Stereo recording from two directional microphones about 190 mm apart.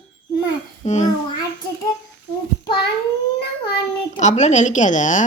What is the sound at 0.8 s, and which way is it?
Speech, 35° left (ahead or behind).